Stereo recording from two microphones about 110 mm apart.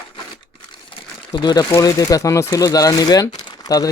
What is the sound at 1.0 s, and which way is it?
Crumpling, 45° left (ahead or behind).